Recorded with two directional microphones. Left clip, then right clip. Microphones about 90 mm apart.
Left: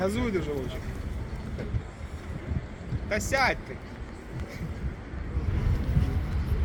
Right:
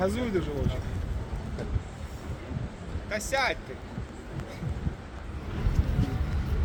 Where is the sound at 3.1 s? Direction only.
5° right (ahead or behind).